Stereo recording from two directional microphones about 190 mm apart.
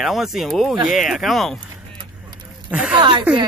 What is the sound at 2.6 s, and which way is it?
Speech, 5° right (ahead or behind).